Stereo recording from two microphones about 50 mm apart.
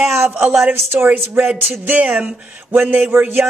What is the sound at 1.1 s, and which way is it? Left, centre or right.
Speech, right.